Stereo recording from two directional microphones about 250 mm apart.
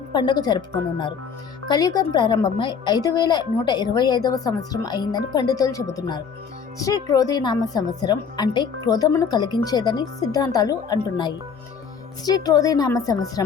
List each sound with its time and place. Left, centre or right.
0.1 s a woman's voice: centre